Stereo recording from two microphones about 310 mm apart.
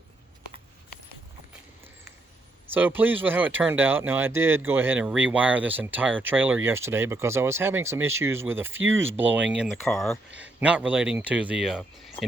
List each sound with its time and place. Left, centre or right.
2.7 s speech: centre